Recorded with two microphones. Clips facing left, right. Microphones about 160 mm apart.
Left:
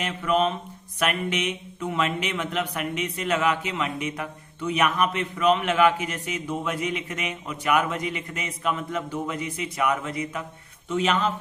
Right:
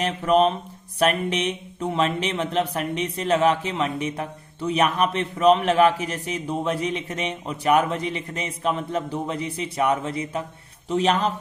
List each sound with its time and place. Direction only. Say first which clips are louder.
0.0 s speech: right 4 dB; 35° right (ahead or behind)